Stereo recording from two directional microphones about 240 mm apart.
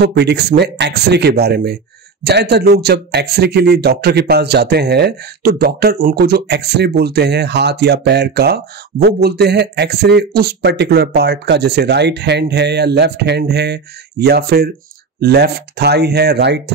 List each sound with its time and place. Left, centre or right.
0.0 s speech: right